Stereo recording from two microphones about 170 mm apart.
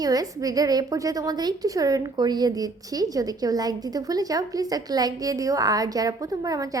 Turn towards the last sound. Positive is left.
turn(degrees=-20)  # may be behind; listen again after turning